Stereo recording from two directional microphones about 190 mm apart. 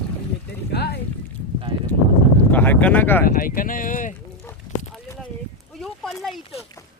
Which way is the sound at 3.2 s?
50° left (ahead or behind).